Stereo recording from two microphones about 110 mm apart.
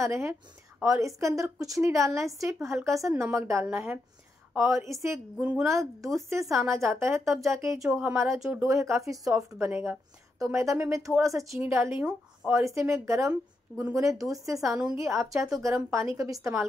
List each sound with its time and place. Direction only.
0.0 s a woman's voice: 25° right (ahead or behind)
3.6 s speech: 10° right (ahead or behind)
4.6 s a woman's voice: 25° right (ahead or behind)
5.4 s speech: 10° right (ahead or behind)
5.7 s a woman's voice: 25° right (ahead or behind)
7.9 s speech: 10° right (ahead or behind)
8.5 s a woman's voice: 25° right (ahead or behind)
9.7 s speech: 15° right (ahead or behind)
10.4 s a woman's voice: 30° right (ahead or behind)
12.0 s speech: 10° right (ahead or behind)
12.5 s a woman's voice: 25° right (ahead or behind)